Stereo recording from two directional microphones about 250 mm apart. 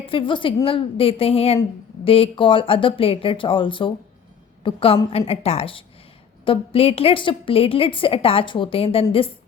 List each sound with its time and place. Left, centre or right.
0.0 s a woman's voice: left